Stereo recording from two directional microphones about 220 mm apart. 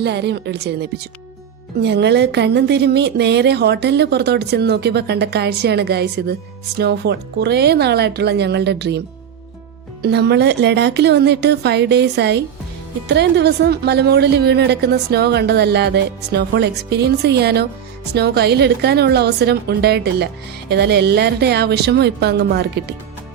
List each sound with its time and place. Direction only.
0.0 s a woman's voice: 50° right (ahead or behind)
10.0 s a woman's voice: 50° right (ahead or behind)